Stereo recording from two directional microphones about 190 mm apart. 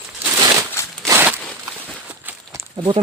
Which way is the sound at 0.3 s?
20° right (ahead or behind).